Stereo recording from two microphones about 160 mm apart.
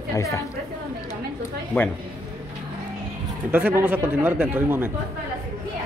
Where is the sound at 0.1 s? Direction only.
20° left (ahead or behind).